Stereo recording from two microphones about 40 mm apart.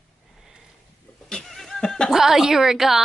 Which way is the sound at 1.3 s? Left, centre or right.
Centre.